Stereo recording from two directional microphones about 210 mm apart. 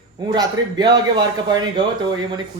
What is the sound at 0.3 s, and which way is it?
A man's voice, 20° right (ahead or behind).